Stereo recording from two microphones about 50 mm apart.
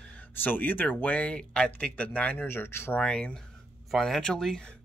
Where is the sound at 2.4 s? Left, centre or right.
Left.